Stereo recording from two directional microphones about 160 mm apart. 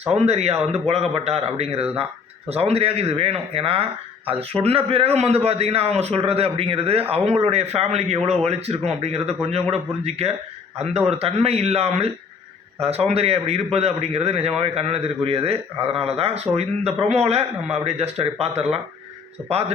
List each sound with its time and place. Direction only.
0.1 s a man's voice: 40° right (ahead or behind)